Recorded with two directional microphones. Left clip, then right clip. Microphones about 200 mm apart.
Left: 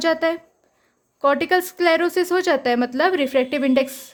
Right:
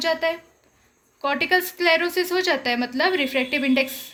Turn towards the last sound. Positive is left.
turn(degrees=50)  # may be behind; listen again after turning